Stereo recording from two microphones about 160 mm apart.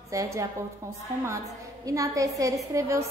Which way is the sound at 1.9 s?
20° right (ahead or behind).